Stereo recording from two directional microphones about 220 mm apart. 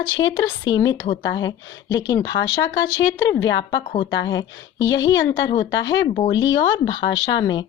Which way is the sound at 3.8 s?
30° left (ahead or behind).